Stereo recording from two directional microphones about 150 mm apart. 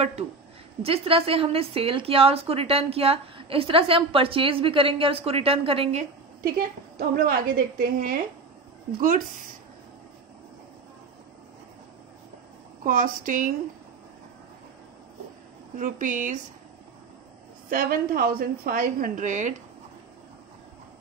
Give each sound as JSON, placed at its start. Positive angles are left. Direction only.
{"t": 0.8, "sound": "a woman's voice", "side_deg": -40}
{"t": 7.0, "sound": "a woman's voice", "side_deg": -75}
{"t": 12.8, "sound": "speech", "side_deg": -65}
{"t": 15.8, "sound": "speech", "side_deg": -60}
{"t": 17.6, "sound": "a woman's voice", "side_deg": -70}